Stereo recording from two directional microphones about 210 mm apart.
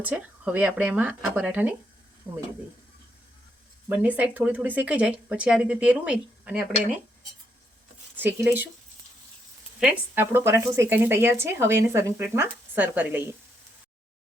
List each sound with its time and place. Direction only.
0.0 s speech: 5° right (ahead or behind)
3.8 s speech: 10° right (ahead or behind)
8.1 s speech: 10° right (ahead or behind)
9.8 s speech: 10° right (ahead or behind)